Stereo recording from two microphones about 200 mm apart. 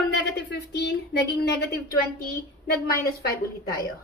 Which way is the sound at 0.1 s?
55° left (ahead or behind).